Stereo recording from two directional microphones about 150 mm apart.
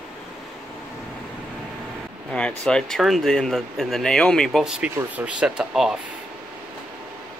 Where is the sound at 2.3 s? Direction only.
5° left (ahead or behind).